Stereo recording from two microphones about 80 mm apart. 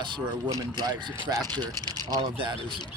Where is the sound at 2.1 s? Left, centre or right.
Right.